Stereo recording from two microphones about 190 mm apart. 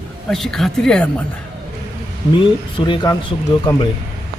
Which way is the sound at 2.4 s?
25° left (ahead or behind).